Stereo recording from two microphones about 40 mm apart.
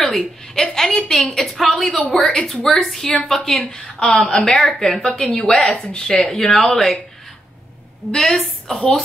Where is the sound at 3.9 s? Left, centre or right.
Left.